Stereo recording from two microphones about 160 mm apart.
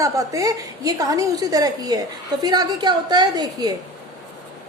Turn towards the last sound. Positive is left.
turn(degrees=-25)  # may be behind; listen again after turning